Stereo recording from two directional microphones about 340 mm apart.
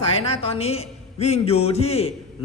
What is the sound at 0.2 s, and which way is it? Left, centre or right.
A woman's voice, centre.